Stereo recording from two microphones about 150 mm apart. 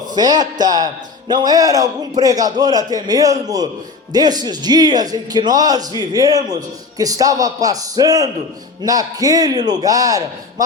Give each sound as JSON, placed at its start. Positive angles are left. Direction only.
{"t": 0.0, "sound": "a man's voice", "side_deg": -25}